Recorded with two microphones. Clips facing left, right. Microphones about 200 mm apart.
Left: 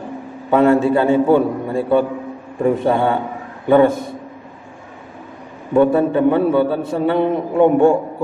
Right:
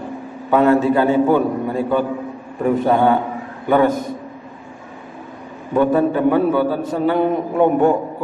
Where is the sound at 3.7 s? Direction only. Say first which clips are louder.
Left 3 dB; 25° left (ahead or behind).